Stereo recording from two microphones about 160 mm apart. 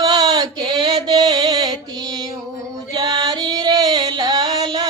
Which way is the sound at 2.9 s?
25° right (ahead or behind).